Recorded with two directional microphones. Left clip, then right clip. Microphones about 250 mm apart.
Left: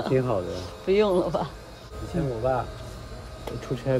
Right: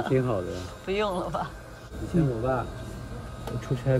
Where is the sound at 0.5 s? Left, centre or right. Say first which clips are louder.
Left 6 dB; left.